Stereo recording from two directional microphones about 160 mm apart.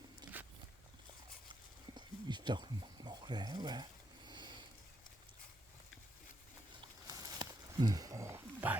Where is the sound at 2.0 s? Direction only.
25° right (ahead or behind).